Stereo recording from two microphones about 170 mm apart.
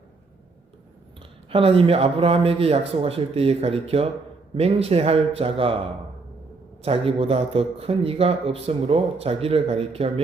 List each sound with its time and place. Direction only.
1.5 s speech: 35° right (ahead or behind)
6.8 s speech: 35° right (ahead or behind)